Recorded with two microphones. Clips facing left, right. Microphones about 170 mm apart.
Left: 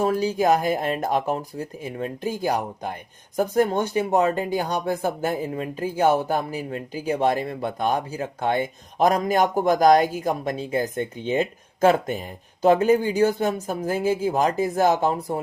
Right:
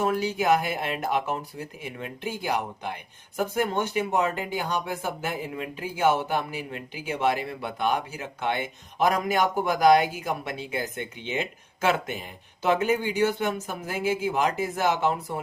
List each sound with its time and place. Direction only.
0.0 s speech: 35° left (ahead or behind)